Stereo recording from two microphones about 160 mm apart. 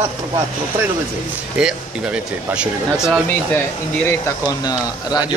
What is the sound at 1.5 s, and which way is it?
Speech, 5° right (ahead or behind).